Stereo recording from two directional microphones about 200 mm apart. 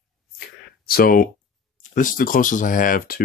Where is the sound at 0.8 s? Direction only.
50° left (ahead or behind).